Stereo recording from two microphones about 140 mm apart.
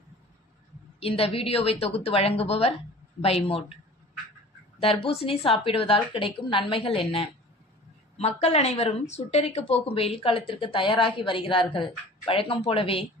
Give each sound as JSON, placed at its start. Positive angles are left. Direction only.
{"t": 0.9, "sound": "a woman's voice", "side_deg": 45}
{"t": 4.8, "sound": "speech", "side_deg": 40}